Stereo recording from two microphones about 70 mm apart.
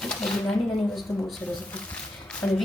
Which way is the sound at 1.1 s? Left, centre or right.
Left.